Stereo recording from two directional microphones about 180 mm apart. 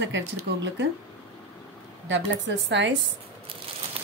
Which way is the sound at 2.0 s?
90° right.